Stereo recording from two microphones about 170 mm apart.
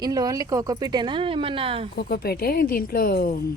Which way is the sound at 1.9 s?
65° left (ahead or behind).